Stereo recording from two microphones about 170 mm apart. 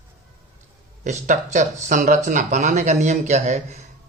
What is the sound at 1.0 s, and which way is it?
Speech, 45° right (ahead or behind).